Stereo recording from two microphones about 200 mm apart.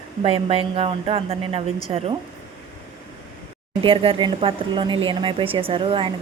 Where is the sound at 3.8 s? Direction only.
25° right (ahead or behind).